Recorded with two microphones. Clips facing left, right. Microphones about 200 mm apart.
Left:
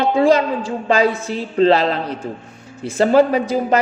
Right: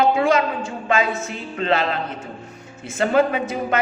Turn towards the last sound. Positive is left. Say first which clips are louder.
# left 5 dB
turn(degrees=35)  # may be behind; listen again after turning